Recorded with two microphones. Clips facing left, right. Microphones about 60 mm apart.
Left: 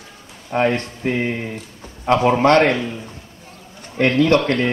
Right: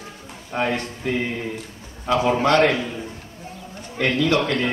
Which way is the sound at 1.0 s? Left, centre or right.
Left.